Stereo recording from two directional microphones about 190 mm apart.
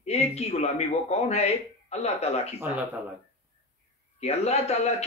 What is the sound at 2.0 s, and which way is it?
Speech, 35° left (ahead or behind).